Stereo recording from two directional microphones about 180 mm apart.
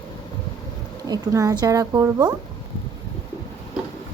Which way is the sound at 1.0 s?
20° right (ahead or behind).